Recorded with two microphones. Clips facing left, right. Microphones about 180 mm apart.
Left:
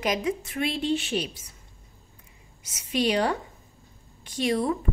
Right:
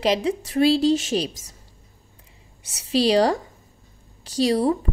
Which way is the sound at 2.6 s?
30° right (ahead or behind).